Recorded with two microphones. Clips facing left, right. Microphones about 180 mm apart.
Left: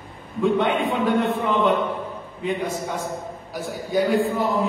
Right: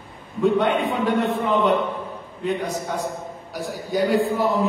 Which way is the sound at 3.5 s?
Centre (ahead or behind).